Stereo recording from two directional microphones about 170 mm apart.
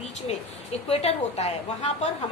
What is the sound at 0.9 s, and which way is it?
Speech, 40° left (ahead or behind).